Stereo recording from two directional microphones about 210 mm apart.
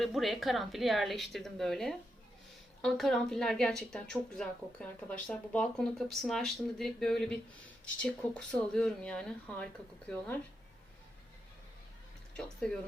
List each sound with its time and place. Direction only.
0.0 s a woman's voice: centre (ahead or behind)
12.4 s a woman's voice: centre (ahead or behind)